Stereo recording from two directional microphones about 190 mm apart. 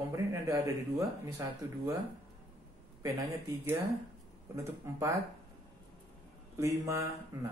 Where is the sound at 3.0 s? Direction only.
10° right (ahead or behind).